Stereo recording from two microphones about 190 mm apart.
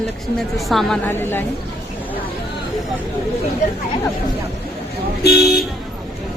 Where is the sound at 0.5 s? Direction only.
Centre (ahead or behind).